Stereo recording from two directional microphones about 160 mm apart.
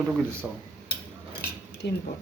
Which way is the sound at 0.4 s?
5° right (ahead or behind).